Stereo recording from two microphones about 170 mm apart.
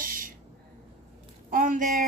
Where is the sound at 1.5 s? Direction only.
55° right (ahead or behind).